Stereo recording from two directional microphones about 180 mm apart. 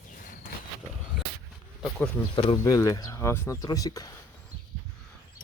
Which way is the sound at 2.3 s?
30° left (ahead or behind).